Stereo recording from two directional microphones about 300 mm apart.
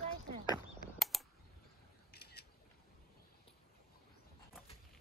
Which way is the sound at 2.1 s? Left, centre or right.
Left.